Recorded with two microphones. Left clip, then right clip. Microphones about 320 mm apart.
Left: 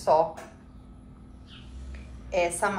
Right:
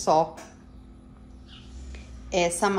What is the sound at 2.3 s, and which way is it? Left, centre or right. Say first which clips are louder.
Speech: right 2 dB; right.